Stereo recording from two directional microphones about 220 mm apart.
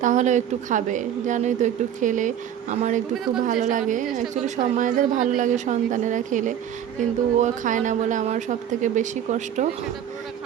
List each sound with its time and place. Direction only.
0.0 s a woman's voice: 35° right (ahead or behind)